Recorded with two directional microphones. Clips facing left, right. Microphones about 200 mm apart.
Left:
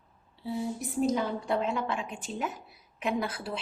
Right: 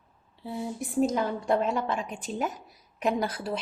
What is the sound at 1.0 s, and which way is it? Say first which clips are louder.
A woman's voice: even; 50° right (ahead or behind).